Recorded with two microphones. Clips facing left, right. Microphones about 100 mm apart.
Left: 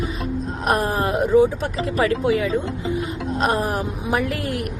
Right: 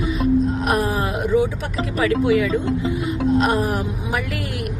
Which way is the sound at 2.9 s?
35° left (ahead or behind).